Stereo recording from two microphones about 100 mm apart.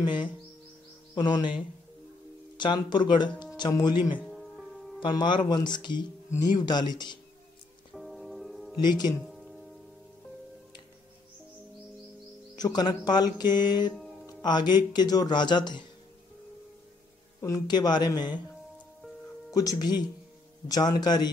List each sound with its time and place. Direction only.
0.0 s music: 50° left (ahead or behind)
1.1 s speech: 50° left (ahead or behind)
2.6 s music: 50° left (ahead or behind)
3.5 s speech: 45° left (ahead or behind)
4.3 s music: centre (ahead or behind)
5.0 s music: 50° left (ahead or behind)
7.9 s music: centre (ahead or behind)
8.7 s speech: 45° left (ahead or behind)
9.3 s music: centre (ahead or behind)
12.5 s music: 40° left (ahead or behind)
17.4 s music: 40° left (ahead or behind)
19.5 s speech: 40° left (ahead or behind)
20.6 s music: 40° left (ahead or behind)